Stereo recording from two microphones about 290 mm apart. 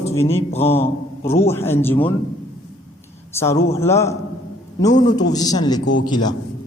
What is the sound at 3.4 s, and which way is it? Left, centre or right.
Speech, centre.